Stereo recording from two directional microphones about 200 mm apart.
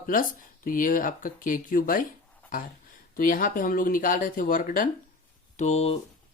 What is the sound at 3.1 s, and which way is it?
Speech, 45° left (ahead or behind).